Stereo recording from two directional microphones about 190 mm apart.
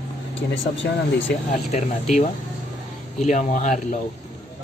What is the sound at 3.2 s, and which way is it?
Speech, 40° left (ahead or behind).